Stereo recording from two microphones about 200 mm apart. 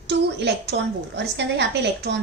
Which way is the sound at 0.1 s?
60° right (ahead or behind).